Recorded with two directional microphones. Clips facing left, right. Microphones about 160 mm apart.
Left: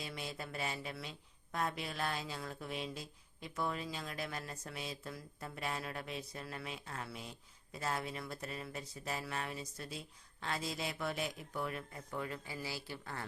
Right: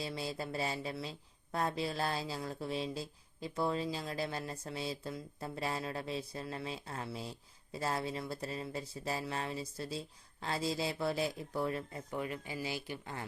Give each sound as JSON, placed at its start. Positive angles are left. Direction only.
{"t": 0.0, "sound": "speech", "side_deg": -30}
{"t": 12.1, "sound": "speech", "side_deg": -20}